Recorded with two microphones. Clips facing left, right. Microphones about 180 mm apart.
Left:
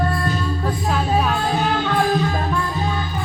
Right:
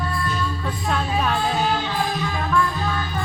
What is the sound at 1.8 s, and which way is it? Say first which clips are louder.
Music: left 6 dB; 55° left (ahead or behind).